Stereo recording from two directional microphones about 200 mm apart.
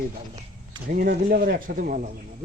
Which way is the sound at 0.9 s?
50° right (ahead or behind).